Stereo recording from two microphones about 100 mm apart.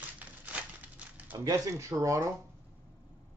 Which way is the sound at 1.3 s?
35° right (ahead or behind).